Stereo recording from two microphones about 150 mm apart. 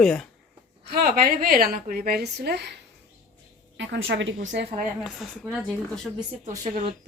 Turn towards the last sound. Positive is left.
turn(degrees=-55)  # may be behind; listen again after turning